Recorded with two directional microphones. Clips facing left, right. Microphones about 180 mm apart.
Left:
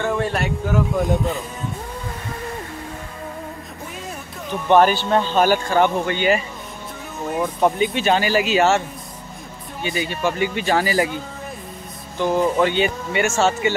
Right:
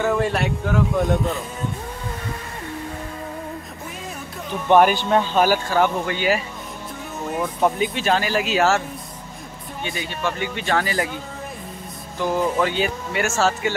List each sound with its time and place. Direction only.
0.0 s speech: centre (ahead or behind)
4.7 s speech: 10° right (ahead or behind)
9.8 s speech: 5° left (ahead or behind)
12.2 s speech: centre (ahead or behind)